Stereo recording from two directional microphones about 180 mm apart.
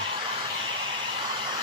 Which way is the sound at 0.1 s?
30° right (ahead or behind).